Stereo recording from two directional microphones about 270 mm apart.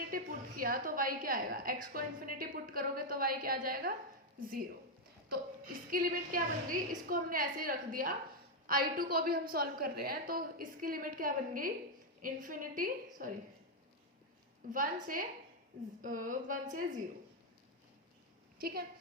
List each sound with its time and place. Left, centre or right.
0.1 s a woman's voice: right
5.9 s a woman's voice: right
14.7 s a woman's voice: right
18.6 s a woman's voice: right